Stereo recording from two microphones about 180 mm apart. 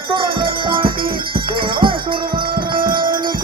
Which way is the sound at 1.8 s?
25° right (ahead or behind).